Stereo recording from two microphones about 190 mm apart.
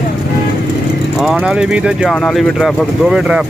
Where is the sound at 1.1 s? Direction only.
5° right (ahead or behind).